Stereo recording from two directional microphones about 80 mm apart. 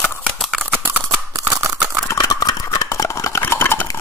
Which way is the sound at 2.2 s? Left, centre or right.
Left.